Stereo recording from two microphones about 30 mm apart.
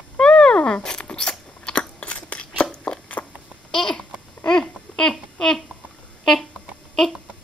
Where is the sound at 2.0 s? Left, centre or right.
Left.